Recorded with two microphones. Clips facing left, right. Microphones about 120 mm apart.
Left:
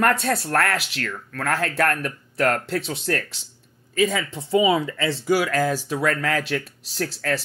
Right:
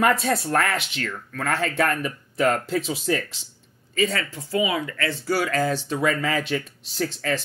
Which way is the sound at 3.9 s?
10° left (ahead or behind).